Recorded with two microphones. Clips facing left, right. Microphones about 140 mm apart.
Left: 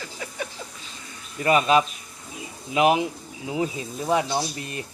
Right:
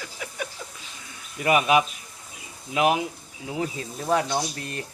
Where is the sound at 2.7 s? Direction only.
15° left (ahead or behind).